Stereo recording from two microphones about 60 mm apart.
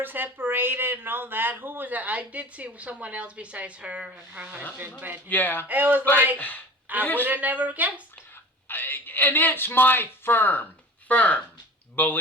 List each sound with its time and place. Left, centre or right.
0.0 s speech: right
4.9 s speech: right
5.3 s speech: left
5.6 s speech: right
6.3 s speech: left
7.3 s speech: right
8.6 s speech: left